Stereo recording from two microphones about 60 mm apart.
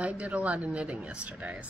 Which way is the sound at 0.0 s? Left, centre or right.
Right.